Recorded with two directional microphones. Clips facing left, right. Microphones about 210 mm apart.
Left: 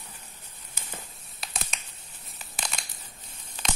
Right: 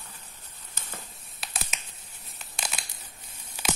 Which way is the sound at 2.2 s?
Centre (ahead or behind).